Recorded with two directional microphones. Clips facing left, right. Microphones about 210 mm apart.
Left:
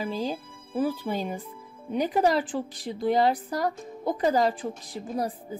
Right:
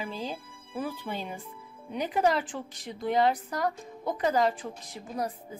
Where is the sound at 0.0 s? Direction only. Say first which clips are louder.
Left 6 dB; 35° left (ahead or behind).